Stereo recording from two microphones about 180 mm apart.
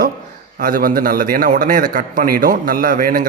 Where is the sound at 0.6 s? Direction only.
50° right (ahead or behind).